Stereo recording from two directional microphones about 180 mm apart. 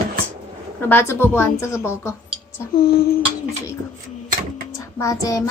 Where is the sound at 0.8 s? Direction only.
15° left (ahead or behind).